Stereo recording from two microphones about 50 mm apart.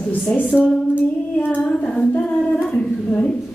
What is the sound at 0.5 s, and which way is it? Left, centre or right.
Female singing, left.